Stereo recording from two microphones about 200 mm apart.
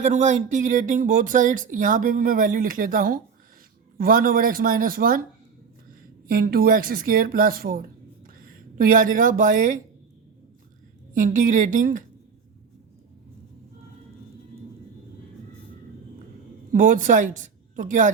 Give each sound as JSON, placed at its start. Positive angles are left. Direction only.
{"t": 0.0, "sound": "speech", "side_deg": -35}
{"t": 6.2, "sound": "speech", "side_deg": -45}
{"t": 11.1, "sound": "speech", "side_deg": -40}
{"t": 16.7, "sound": "speech", "side_deg": -40}